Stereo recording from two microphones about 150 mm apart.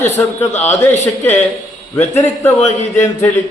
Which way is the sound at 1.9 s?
15° left (ahead or behind).